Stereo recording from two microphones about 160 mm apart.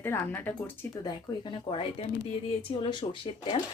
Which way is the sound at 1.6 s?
35° left (ahead or behind).